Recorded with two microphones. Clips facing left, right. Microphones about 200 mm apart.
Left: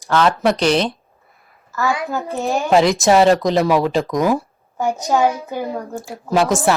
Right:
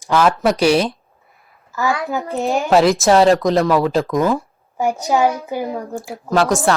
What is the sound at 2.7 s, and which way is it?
Speech, centre (ahead or behind).